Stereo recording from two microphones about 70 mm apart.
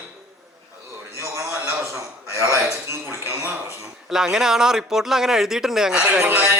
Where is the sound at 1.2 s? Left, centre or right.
Right.